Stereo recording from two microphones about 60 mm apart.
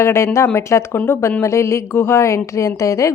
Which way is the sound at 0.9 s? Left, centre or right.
Left.